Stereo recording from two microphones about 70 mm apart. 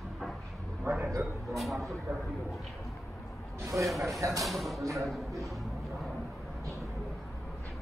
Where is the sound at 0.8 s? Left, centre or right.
Right.